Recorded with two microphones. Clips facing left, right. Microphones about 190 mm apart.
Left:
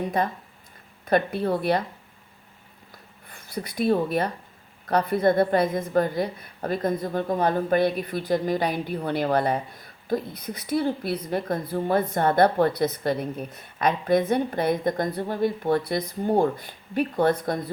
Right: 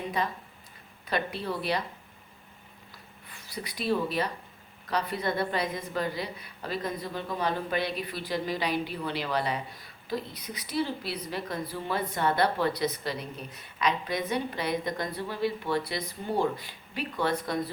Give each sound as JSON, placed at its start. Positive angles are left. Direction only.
{"t": 0.2, "sound": "a woman's voice", "side_deg": 50}
{"t": 3.2, "sound": "a woman's voice", "side_deg": 50}